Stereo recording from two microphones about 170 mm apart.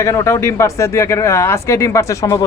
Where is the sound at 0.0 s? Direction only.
15° left (ahead or behind).